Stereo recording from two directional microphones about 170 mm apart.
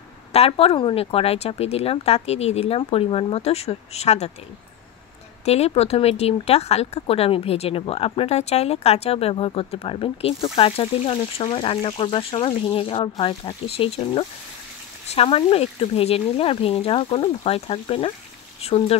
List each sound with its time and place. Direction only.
0.3 s speech: 35° left (ahead or behind)
5.4 s speech: 40° left (ahead or behind)